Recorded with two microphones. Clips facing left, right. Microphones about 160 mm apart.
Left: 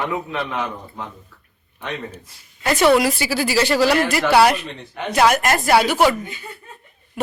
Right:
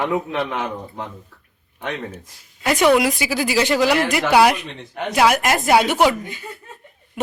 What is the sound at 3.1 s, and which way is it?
Speech, 15° right (ahead or behind).